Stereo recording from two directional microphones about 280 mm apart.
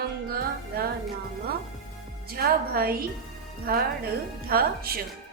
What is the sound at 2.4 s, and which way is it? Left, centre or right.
A woman's voice, right.